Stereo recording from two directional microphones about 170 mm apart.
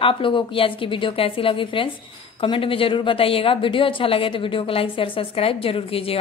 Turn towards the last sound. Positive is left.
turn(degrees=35)  # may be behind; listen again after turning